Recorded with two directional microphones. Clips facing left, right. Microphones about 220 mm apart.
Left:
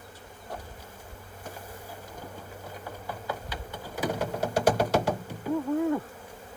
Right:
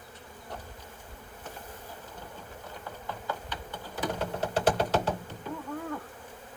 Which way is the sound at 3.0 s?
10° left (ahead or behind).